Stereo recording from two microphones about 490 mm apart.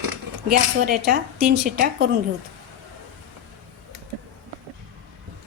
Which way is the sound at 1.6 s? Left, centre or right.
Centre.